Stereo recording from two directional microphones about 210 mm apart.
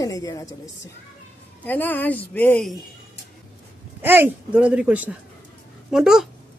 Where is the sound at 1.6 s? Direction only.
10° left (ahead or behind).